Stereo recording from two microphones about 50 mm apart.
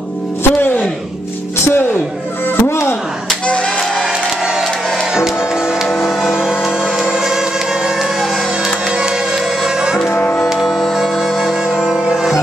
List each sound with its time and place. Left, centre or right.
0.4 s a sound: left
2.7 s speech: left
3.4 s music: left
5.9 s a sound: centre
7.1 s music: centre
9.6 s music: centre
10.5 s music: centre